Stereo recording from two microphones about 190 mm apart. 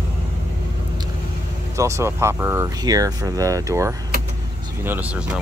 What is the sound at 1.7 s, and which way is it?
Speech, 15° right (ahead or behind).